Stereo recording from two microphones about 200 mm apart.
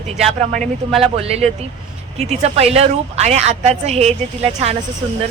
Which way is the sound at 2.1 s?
35° right (ahead or behind).